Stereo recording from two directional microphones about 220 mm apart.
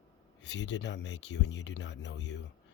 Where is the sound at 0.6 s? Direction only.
55° left (ahead or behind).